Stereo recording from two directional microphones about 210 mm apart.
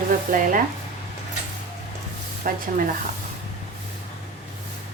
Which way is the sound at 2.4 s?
40° right (ahead or behind).